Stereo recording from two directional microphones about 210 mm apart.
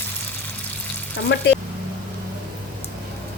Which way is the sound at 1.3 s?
60° left (ahead or behind).